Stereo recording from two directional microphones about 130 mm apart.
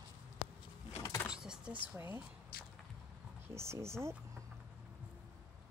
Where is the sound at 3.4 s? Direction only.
20° right (ahead or behind).